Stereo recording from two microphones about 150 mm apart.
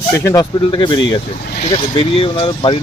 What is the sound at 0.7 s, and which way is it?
Speech, 30° left (ahead or behind).